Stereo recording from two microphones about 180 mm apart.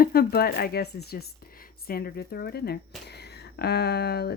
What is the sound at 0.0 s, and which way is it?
Speech, 55° left (ahead or behind).